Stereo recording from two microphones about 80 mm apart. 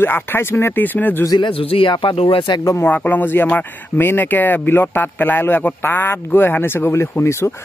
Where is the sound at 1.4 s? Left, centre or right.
Left.